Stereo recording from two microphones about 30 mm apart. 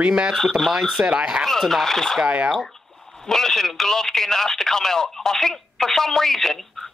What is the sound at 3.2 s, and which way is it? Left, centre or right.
Speech, centre.